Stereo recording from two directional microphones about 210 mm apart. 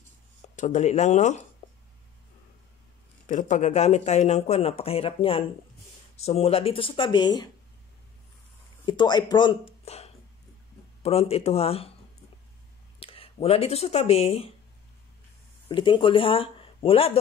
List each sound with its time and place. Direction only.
0.6 s speech: 35° left (ahead or behind)
3.3 s speech: 35° left (ahead or behind); by 7.4 s 20° left (ahead or behind)
8.8 s speech: 20° left (ahead or behind)
13.0 s speech: 25° left (ahead or behind)
15.7 s speech: 25° left (ahead or behind)